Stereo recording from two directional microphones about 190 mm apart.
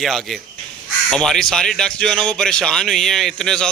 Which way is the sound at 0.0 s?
Centre (ahead or behind).